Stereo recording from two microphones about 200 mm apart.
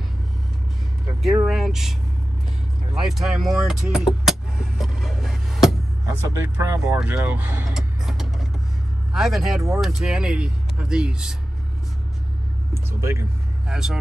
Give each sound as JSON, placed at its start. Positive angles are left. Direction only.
{"t": 1.2, "sound": "speech", "side_deg": 0}
{"t": 3.1, "sound": "speech", "side_deg": 0}
{"t": 4.3, "sound": "a sound", "side_deg": 0}
{"t": 6.0, "sound": "speech", "side_deg": -15}
{"t": 12.7, "sound": "vehicle", "side_deg": -15}
{"t": 13.7, "sound": "speech", "side_deg": -5}